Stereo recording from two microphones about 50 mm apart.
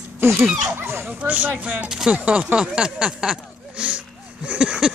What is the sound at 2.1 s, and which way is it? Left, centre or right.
Speech, right.